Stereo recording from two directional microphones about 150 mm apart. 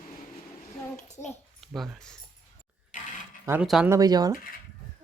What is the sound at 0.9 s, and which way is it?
Speech, 50° left (ahead or behind).